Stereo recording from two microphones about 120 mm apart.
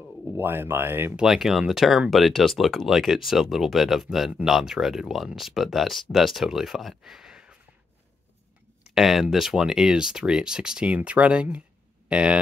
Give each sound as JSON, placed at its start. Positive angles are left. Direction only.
{"t": 0.4, "sound": "speech", "side_deg": -20}
{"t": 1.2, "sound": "speech", "side_deg": 0}
{"t": 8.8, "sound": "speech", "side_deg": 0}